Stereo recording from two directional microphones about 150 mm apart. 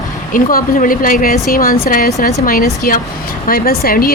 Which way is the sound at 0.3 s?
65° left (ahead or behind).